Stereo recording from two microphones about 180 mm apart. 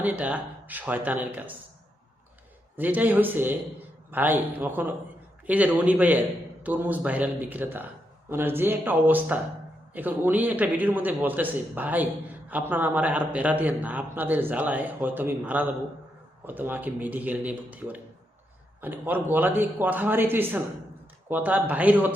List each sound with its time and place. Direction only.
0.0 s a man's voice: 5° right (ahead or behind)
2.7 s a man's voice: 10° right (ahead or behind)